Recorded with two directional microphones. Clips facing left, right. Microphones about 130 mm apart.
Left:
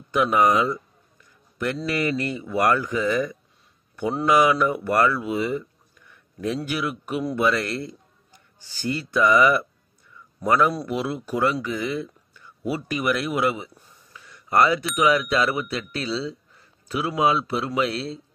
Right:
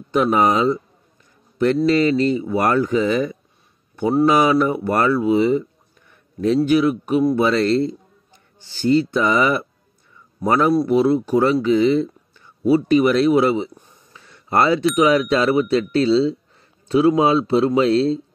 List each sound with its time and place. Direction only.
0.1 s speech: 25° right (ahead or behind)
1.9 s speech: 25° right (ahead or behind)